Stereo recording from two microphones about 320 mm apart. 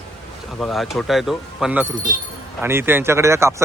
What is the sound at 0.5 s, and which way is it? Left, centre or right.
Speech, centre.